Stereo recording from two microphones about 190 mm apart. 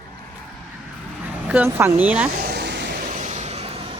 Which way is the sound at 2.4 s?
60° right (ahead or behind).